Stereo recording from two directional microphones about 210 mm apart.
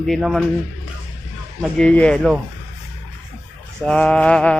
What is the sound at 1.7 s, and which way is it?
Speech, 5° left (ahead or behind).